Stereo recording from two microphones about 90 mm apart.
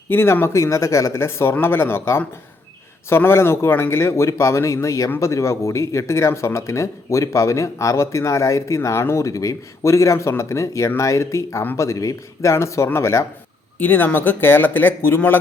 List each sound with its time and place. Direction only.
0.1 s speech: 25° left (ahead or behind)
13.7 s speech: 20° left (ahead or behind)